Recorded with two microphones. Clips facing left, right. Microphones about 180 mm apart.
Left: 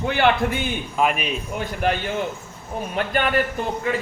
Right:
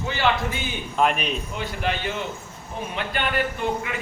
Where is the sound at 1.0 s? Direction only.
5° left (ahead or behind).